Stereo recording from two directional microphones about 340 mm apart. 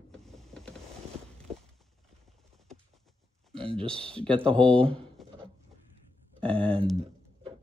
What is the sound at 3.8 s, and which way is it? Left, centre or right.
Speech, centre.